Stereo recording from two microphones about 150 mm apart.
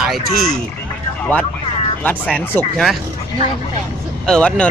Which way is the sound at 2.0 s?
10° left (ahead or behind).